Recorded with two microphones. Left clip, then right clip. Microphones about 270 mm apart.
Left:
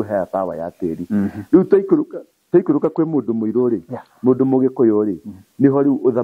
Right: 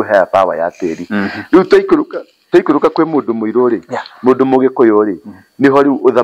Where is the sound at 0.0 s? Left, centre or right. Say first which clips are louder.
Right 10 dB; centre.